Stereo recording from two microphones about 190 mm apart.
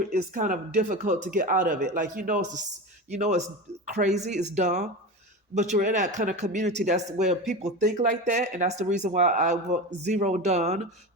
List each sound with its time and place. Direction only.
0.1 s speech: 50° right (ahead or behind)